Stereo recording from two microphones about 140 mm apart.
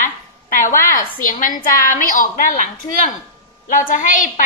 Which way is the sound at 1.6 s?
70° left (ahead or behind).